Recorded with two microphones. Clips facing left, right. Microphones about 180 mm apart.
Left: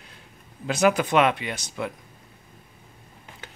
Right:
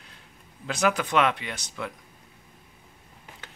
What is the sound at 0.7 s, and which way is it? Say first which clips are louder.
Speech: left 4 dB; 10° left (ahead or behind).